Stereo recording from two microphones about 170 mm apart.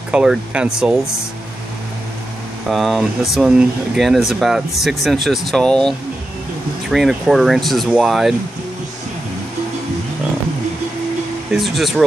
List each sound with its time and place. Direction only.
0.1 s speech: 5° right (ahead or behind)
2.7 s speech: centre (ahead or behind)
11.5 s speech: centre (ahead or behind)